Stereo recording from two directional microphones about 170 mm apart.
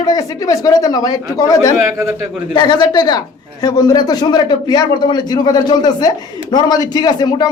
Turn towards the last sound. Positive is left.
turn(degrees=25)  # may be behind; listen again after turning